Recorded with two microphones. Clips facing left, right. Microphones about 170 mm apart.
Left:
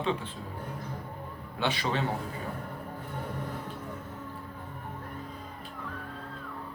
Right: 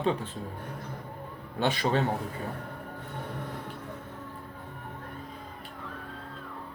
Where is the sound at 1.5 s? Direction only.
45° right (ahead or behind).